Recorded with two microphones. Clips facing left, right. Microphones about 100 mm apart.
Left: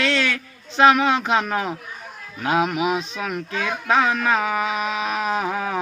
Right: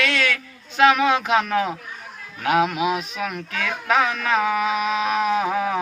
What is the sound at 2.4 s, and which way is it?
Speech, 25° left (ahead or behind).